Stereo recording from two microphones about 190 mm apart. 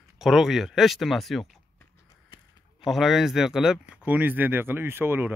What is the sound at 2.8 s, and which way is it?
Speech, centre (ahead or behind).